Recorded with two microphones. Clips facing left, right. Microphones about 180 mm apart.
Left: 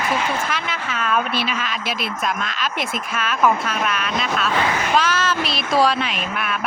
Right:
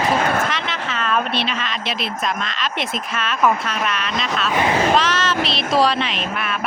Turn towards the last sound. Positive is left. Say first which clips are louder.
# right 1 dB
turn(degrees=0)  # may be behind; listen again after turning